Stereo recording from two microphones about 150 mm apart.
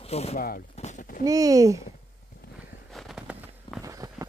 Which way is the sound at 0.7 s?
50° left (ahead or behind).